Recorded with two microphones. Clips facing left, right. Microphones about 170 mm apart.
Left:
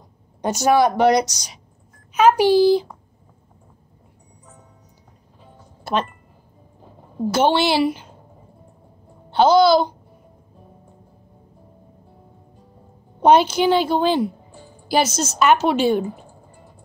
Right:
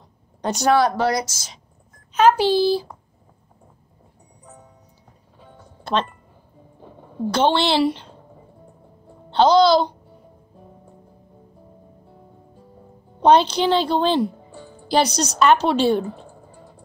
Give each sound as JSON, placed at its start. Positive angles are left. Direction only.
{"t": 0.4, "sound": "a woman's voice", "side_deg": 10}
{"t": 7.2, "sound": "a woman's voice", "side_deg": 10}
{"t": 9.3, "sound": "a woman's voice", "side_deg": 10}
{"t": 13.2, "sound": "a woman's voice", "side_deg": 10}